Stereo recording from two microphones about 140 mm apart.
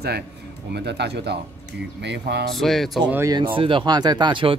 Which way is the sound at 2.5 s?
Centre (ahead or behind).